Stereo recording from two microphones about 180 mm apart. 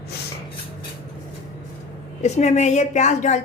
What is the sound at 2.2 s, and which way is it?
A woman's voice, 40° left (ahead or behind).